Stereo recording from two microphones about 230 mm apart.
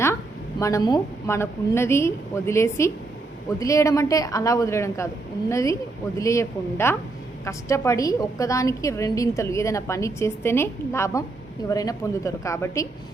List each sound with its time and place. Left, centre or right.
0.6 s a woman's voice: centre